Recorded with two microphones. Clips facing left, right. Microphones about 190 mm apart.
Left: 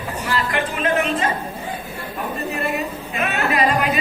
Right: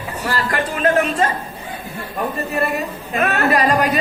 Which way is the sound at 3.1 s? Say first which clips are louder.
Right 5 dB; 45° right (ahead or behind).